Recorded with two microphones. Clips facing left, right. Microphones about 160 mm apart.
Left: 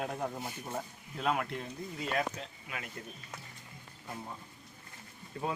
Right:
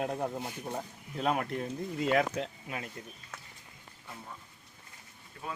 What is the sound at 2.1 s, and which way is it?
Speech, 75° right (ahead or behind).